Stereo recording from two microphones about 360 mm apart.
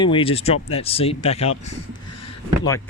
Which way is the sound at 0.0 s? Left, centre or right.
Centre.